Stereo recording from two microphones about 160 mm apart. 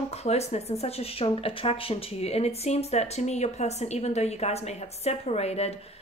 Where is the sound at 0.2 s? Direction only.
40° left (ahead or behind).